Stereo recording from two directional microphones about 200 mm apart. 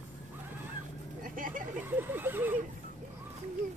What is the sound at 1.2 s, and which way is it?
Vehicle, 45° right (ahead or behind).